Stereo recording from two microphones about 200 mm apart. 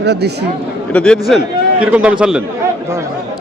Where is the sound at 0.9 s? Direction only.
5° left (ahead or behind).